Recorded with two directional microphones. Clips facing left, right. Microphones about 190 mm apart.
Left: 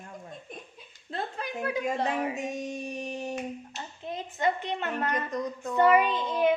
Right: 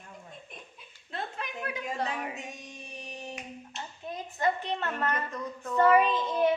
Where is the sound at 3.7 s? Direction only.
20° left (ahead or behind).